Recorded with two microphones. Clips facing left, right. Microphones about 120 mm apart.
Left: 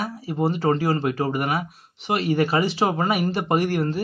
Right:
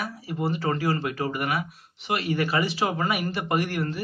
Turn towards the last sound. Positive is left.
turn(degrees=30)  # may be behind; listen again after turning